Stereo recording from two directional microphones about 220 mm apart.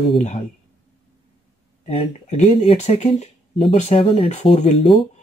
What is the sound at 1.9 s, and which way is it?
Speech, 30° left (ahead or behind).